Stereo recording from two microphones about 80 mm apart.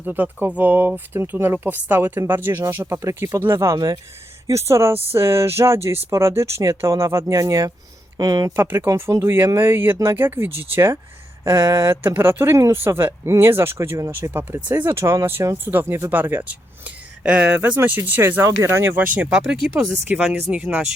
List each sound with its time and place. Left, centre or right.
0.0 s speech: right
3.8 s speech: right
4.4 s speech: right
8.5 s speech: right
18.4 s speech: right
19.6 s speech: centre